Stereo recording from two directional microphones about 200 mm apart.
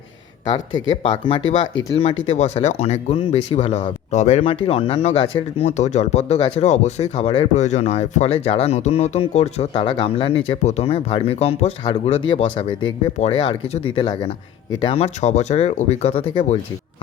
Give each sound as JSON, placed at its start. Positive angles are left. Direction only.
{"t": 1.4, "sound": "speech", "side_deg": 75}
{"t": 2.2, "sound": "speech", "side_deg": 35}